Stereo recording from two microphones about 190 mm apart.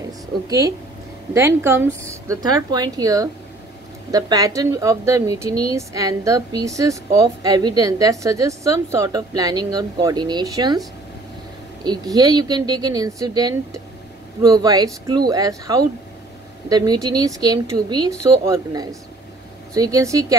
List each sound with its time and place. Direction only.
0.5 s a woman's voice: 20° right (ahead or behind)
11.8 s a woman's voice: 20° right (ahead or behind)